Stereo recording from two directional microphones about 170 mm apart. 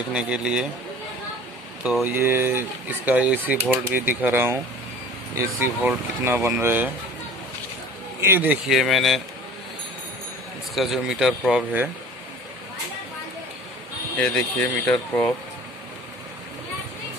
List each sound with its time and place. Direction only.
0.1 s speech: 5° right (ahead or behind)
1.8 s speech: 5° right (ahead or behind)
8.2 s speech: 10° right (ahead or behind)
10.7 s speech: centre (ahead or behind)
14.1 s speech: 5° left (ahead or behind)